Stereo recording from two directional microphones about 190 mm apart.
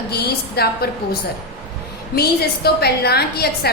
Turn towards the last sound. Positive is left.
turn(degrees=55)  # may be behind; listen again after turning